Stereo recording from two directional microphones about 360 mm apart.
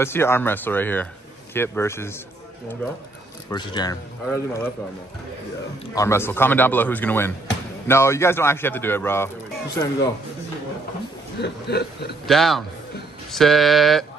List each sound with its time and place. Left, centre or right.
0.0 s a man's voice: centre
3.4 s a man's voice: centre
5.9 s a man's voice: centre
11.3 s chuckle: left
12.3 s a man's voice: centre